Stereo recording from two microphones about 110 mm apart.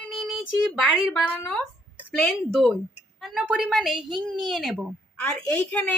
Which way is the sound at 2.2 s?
Centre (ahead or behind).